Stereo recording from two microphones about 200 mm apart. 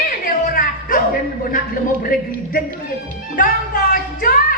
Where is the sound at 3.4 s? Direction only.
45° left (ahead or behind).